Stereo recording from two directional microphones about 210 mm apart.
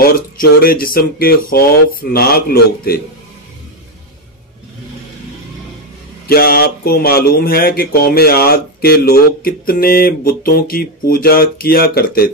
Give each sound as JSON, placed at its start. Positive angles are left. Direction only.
{"t": 0.0, "sound": "speech", "side_deg": 45}
{"t": 6.2, "sound": "speech", "side_deg": 45}